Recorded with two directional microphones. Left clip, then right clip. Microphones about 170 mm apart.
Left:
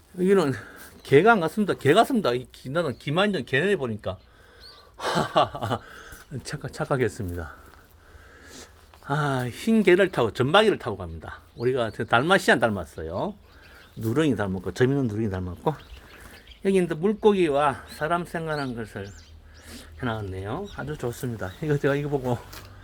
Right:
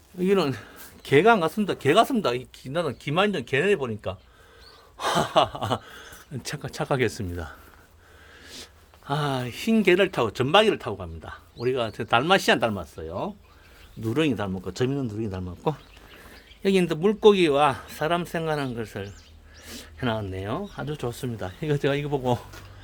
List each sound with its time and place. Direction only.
0.2 s speech: 5° left (ahead or behind)
4.9 s a sound: centre (ahead or behind)
6.3 s speech: 10° right (ahead or behind)
8.4 s a sound: 5° right (ahead or behind)
9.7 s speech: 5° left (ahead or behind)
16.6 s speech: 35° right (ahead or behind)
21.1 s speech: 10° right (ahead or behind)